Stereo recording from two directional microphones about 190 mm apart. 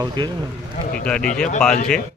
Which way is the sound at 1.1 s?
5° left (ahead or behind).